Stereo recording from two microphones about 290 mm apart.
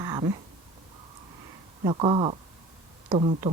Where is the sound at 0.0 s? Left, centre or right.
Centre.